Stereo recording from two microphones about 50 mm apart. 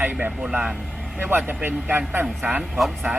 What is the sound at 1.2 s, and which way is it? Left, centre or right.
Speech, right.